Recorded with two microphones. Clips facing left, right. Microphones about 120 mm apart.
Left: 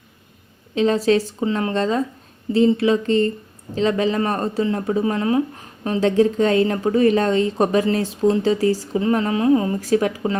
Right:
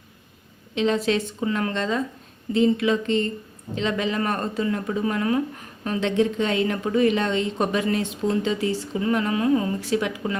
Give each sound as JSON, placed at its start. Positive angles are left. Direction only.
{"t": 0.8, "sound": "speech", "side_deg": 35}
{"t": 1.5, "sound": "speech", "side_deg": 25}
{"t": 1.7, "sound": "speech", "side_deg": 35}
{"t": 6.0, "sound": "speech", "side_deg": 40}
{"t": 9.8, "sound": "speech", "side_deg": 40}